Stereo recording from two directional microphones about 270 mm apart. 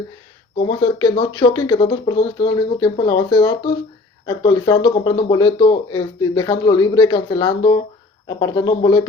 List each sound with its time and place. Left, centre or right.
0.5 s speech: centre